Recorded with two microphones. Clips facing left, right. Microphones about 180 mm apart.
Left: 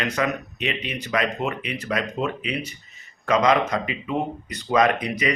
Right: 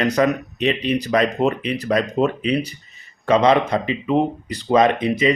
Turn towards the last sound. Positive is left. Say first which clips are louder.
# right 5 dB
turn(degrees=-25)  # may be behind; listen again after turning